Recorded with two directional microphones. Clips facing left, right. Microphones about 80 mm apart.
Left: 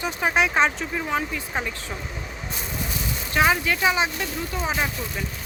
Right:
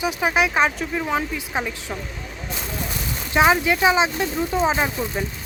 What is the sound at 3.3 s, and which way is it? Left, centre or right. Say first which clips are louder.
Speech: right 4 dB; centre.